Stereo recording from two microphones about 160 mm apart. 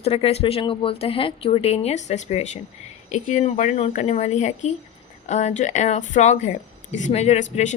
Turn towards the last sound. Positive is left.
turn(degrees=50)  # may be behind; listen again after turning